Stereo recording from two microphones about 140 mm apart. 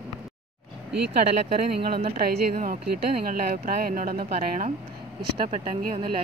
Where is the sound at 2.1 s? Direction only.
90° right.